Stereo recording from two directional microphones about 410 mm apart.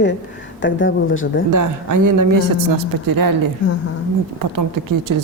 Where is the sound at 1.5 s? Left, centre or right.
Right.